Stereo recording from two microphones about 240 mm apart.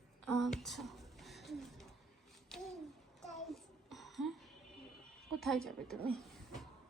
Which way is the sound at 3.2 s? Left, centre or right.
Centre.